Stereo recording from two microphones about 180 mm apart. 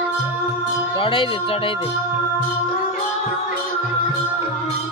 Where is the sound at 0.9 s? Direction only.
30° left (ahead or behind).